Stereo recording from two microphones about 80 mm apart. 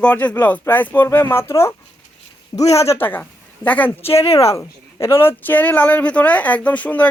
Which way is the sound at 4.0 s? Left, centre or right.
Left.